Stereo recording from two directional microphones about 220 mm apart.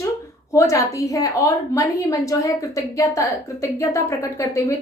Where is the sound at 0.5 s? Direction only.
15° left (ahead or behind).